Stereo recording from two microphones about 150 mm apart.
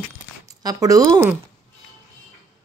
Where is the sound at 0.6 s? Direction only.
25° right (ahead or behind).